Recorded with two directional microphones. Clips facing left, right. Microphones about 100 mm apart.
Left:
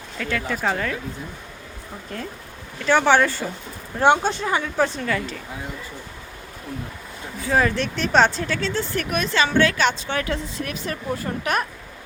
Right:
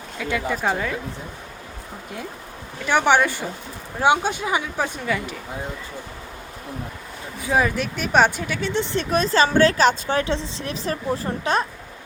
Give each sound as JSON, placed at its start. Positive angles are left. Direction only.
{"t": 0.2, "sound": "a woman's voice", "side_deg": -15}
{"t": 2.8, "sound": "a woman's voice", "side_deg": -15}
{"t": 7.4, "sound": "speech", "side_deg": -10}